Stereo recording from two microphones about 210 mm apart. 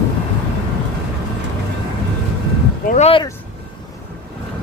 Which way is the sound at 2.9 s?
30° left (ahead or behind).